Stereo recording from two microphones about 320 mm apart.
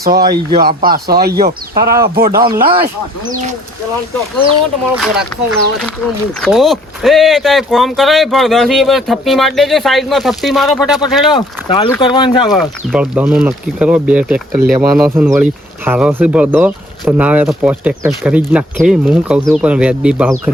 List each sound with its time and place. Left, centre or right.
0.0 s speech: right
2.4 s speech: centre
5.1 s speech: centre
11.3 s speech: centre
12.5 s speech: centre